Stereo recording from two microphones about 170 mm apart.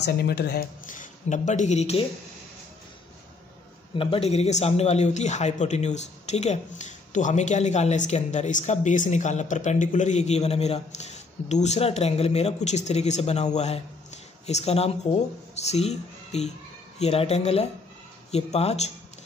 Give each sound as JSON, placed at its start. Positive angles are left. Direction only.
{"t": 0.0, "sound": "speech", "side_deg": 70}
{"t": 0.8, "sound": "speech", "side_deg": 45}
{"t": 3.9, "sound": "speech", "side_deg": 30}